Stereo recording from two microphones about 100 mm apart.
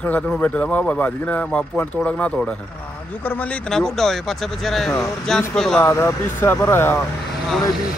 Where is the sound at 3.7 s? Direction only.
5° left (ahead or behind).